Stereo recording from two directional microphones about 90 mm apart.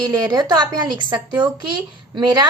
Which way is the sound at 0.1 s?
50° right (ahead or behind).